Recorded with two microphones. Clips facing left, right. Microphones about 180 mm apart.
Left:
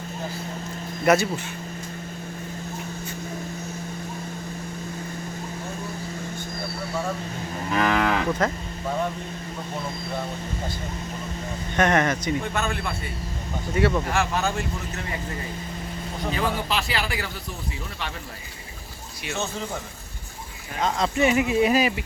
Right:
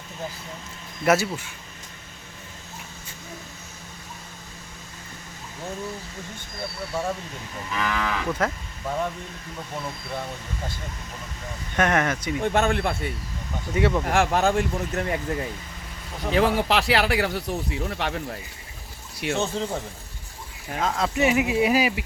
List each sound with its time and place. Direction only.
1.0 s speech: 5° right (ahead or behind)
7.7 s moo: 55° left (ahead or behind)
8.4 s speech: 5° right (ahead or behind)
11.8 s speech: 5° right (ahead or behind)
12.5 s a man's voice: 60° right (ahead or behind)
13.7 s speech: 15° right (ahead or behind)
14.1 s speech: 50° right (ahead or behind)
16.3 s speech: 70° right (ahead or behind)
20.8 s speech: 5° right (ahead or behind)